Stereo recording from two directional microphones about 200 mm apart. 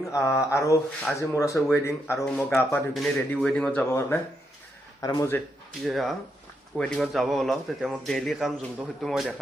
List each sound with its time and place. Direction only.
0.1 s speech: 15° left (ahead or behind)
5.8 s speech: centre (ahead or behind)